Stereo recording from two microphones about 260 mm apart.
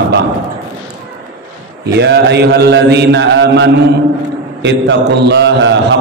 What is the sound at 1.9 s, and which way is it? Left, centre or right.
A man's voice, right.